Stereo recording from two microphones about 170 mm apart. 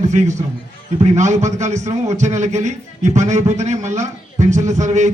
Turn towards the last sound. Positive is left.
turn(degrees=-45)  # may be behind; listen again after turning